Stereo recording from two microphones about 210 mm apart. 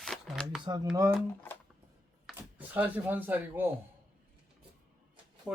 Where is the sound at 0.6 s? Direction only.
20° right (ahead or behind).